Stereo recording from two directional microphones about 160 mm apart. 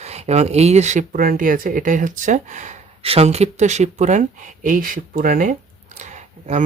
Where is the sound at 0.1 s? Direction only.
45° right (ahead or behind).